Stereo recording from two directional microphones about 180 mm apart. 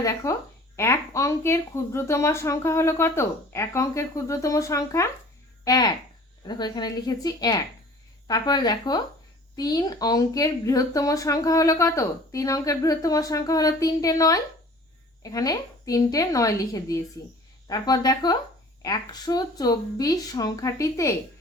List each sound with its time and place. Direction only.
0.0 s speech: 20° left (ahead or behind)